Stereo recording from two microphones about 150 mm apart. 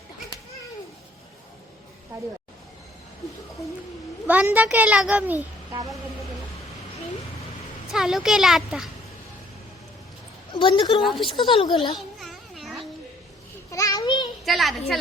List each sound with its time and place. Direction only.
2.1 s speech: 20° right (ahead or behind)
4.3 s a child's voice: 10° right (ahead or behind)
7.9 s speech: 5° right (ahead or behind)
10.5 s a woman's voice: 35° left (ahead or behind)
11.9 s a sound: centre (ahead or behind)
13.7 s children playing: 20° left (ahead or behind)
14.4 s speech: centre (ahead or behind)